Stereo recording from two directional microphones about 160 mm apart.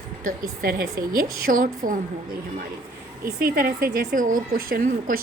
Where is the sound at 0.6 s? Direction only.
70° right (ahead or behind).